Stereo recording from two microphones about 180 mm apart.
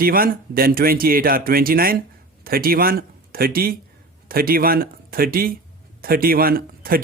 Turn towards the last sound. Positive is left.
turn(degrees=-55)  # may be behind; listen again after turning